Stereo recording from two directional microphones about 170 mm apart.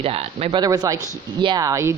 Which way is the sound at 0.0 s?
35° right (ahead or behind).